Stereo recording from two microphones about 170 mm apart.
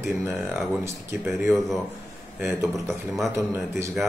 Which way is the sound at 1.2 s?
Centre (ahead or behind).